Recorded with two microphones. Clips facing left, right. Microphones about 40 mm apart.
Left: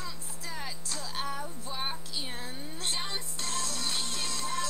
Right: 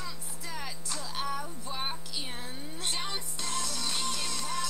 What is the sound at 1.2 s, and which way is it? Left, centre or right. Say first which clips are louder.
Music: right 2 dB; centre.